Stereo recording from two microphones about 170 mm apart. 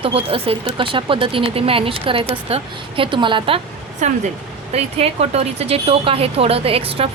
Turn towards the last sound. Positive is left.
turn(degrees=-35)  # may be behind; listen again after turning